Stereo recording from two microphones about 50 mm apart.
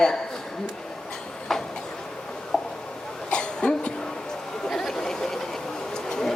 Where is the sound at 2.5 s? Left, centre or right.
Centre.